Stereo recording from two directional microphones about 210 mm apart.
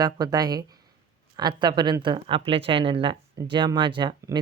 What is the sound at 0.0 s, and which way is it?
Speech, 20° right (ahead or behind).